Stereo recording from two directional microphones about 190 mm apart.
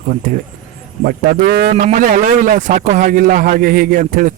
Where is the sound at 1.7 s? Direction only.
35° right (ahead or behind).